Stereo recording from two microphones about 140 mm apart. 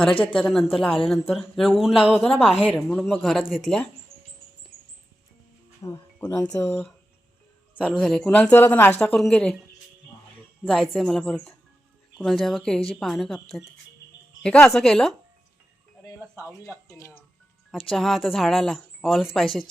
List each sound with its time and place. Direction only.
0.1 s speech: 40° left (ahead or behind)
0.3 s speech: centre (ahead or behind)
2.1 s speech: 5° left (ahead or behind)
5.8 s speech: 25° left (ahead or behind)
6.4 s speech: 15° left (ahead or behind)
7.9 s speech: 5° left (ahead or behind)
9.0 s speech: 5° left (ahead or behind)
10.7 s speech: centre (ahead or behind)
16.6 s speech: 20° left (ahead or behind)
17.7 s speech: centre (ahead or behind)